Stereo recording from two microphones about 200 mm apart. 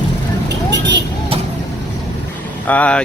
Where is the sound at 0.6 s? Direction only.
60° right (ahead or behind).